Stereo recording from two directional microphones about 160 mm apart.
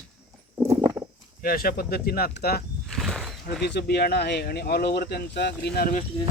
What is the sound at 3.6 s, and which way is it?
Speech, 90° left.